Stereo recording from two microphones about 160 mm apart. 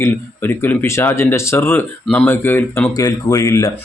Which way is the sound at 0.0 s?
15° left (ahead or behind).